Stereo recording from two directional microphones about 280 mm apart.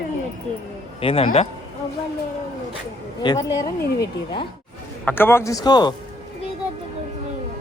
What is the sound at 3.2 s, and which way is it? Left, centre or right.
Speech, centre.